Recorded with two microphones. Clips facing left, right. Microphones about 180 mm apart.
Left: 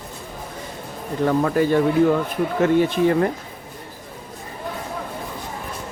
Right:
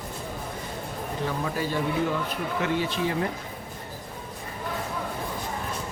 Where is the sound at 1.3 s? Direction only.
55° left (ahead or behind).